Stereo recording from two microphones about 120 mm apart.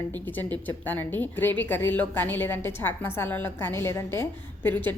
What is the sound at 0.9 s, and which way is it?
A woman's voice, 15° left (ahead or behind).